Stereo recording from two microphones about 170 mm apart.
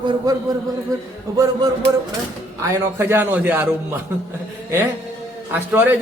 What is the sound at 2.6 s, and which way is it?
A man's voice, 15° right (ahead or behind).